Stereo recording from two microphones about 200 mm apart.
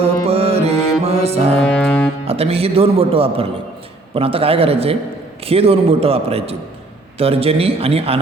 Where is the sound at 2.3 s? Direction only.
30° right (ahead or behind).